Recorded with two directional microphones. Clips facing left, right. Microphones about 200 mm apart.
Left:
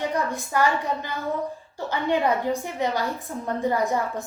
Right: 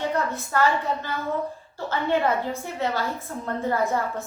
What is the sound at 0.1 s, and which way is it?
A woman's voice, 15° left (ahead or behind).